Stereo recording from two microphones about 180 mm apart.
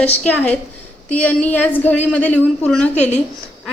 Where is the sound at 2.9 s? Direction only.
40° left (ahead or behind).